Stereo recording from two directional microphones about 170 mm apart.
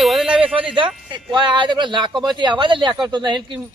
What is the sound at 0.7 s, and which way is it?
Speech, 30° right (ahead or behind).